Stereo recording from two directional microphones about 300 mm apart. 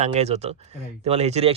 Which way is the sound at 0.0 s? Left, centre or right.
Right.